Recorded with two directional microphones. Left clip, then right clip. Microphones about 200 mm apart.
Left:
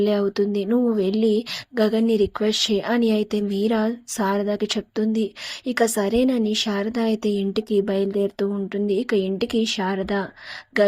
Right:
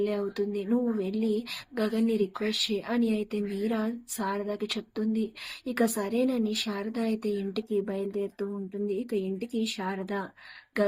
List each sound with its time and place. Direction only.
0.0 s speech: 40° left (ahead or behind)